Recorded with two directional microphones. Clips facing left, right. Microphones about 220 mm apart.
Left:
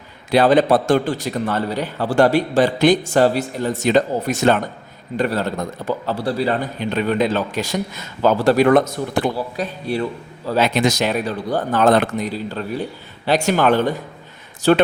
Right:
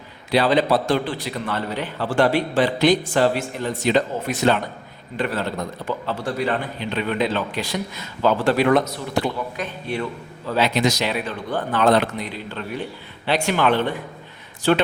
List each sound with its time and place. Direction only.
0.3 s a man's voice: 50° left (ahead or behind)
9.6 s a man's voice: 35° left (ahead or behind)